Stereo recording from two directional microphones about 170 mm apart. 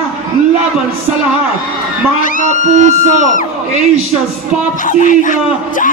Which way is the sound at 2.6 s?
45° right (ahead or behind).